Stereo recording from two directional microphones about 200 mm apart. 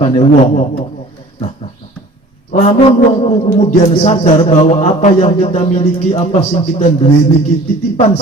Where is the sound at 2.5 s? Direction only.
35° left (ahead or behind).